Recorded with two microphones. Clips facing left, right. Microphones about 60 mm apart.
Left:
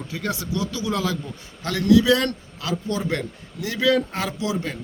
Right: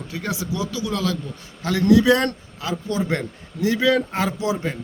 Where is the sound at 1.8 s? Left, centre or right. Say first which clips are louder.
Right 1 dB; right.